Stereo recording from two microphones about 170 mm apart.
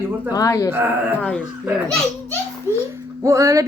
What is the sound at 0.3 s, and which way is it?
Speech, 20° left (ahead or behind).